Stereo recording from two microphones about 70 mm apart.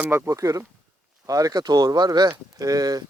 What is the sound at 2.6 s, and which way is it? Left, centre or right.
Speech, right.